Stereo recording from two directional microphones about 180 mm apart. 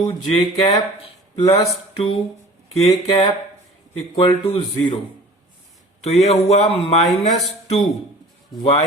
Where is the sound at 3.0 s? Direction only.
30° left (ahead or behind).